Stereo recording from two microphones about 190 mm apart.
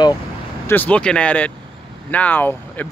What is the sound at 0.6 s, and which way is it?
Speech, 10° left (ahead or behind).